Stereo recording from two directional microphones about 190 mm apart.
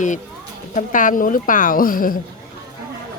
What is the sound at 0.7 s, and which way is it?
A woman's voice, 45° left (ahead or behind).